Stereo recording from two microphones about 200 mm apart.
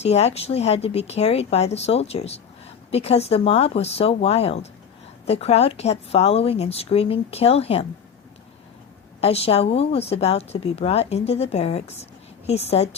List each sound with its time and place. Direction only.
0.0 s a woman's voice: 30° left (ahead or behind)
9.2 s a woman's voice: 30° left (ahead or behind)